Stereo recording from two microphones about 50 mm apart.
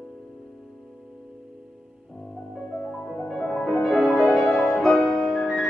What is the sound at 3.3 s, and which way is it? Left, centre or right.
Music, centre.